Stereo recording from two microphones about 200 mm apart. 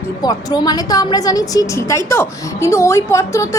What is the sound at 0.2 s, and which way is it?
A woman's voice, 20° left (ahead or behind).